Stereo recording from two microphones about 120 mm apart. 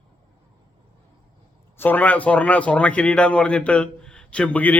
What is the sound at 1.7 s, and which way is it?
Speech, 15° left (ahead or behind).